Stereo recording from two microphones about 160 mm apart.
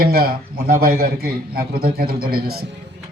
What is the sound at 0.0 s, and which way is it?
A man's voice, 70° right (ahead or behind).